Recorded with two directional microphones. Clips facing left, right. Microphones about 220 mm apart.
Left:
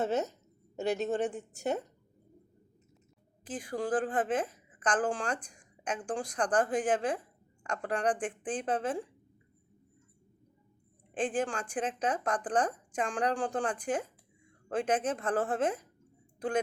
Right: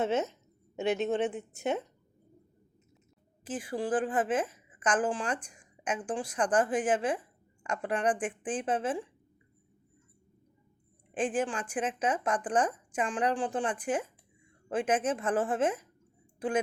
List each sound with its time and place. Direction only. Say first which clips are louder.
0.9 s a woman's voice: right 2 dB; 45° left (ahead or behind)
3.4 s a woman's voice: right 1 dB; 5° right (ahead or behind)
11.1 s a woman's voice: right 1 dB; 5° right (ahead or behind)